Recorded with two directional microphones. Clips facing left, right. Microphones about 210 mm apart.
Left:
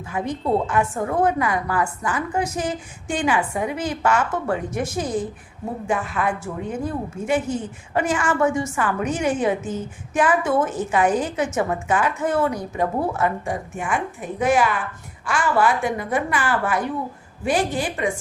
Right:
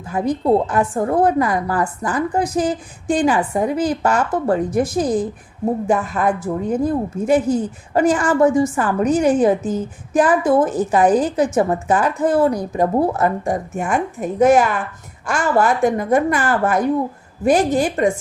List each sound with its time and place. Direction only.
0.0 s a woman's voice: 35° right (ahead or behind)